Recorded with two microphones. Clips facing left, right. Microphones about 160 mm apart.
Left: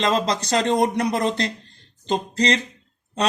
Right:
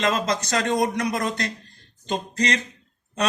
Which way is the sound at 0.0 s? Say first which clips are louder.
Left 2 dB; 30° left (ahead or behind).